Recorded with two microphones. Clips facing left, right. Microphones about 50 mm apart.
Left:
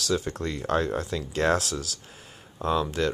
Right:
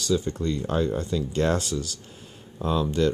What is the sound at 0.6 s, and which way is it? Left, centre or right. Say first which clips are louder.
Speech: left 3 dB; left.